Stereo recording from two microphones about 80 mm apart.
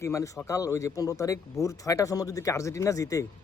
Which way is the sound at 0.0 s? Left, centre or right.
Left.